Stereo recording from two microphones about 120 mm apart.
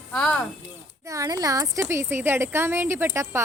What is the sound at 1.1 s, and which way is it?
A woman's voice, 30° right (ahead or behind).